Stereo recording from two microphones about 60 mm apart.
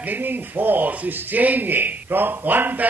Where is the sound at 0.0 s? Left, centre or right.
Right.